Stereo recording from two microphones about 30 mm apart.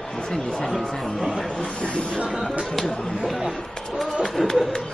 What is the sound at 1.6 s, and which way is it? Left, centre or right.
Speech, left.